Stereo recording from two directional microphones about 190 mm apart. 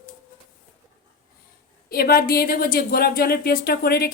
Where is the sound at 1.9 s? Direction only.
55° left (ahead or behind).